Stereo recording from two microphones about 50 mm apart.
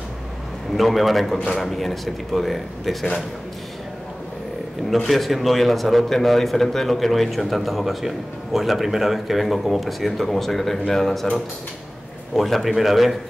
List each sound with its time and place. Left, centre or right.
0.7 s a man's voice: centre
4.8 s a man's voice: centre
12.4 s a man's voice: centre